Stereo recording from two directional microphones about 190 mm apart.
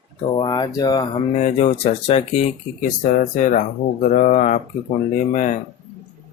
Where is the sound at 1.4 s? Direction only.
35° left (ahead or behind).